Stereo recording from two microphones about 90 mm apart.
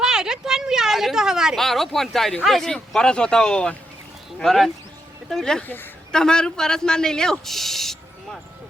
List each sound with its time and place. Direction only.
0.0 s speech: 5° right (ahead or behind)
5.6 s a woman's voice: 20° left (ahead or behind)
6.1 s speech: 5° left (ahead or behind)